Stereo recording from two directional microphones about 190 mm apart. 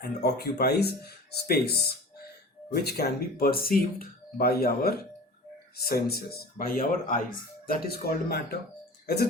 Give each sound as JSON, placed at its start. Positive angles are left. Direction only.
{"t": 0.0, "sound": "speech", "side_deg": 55}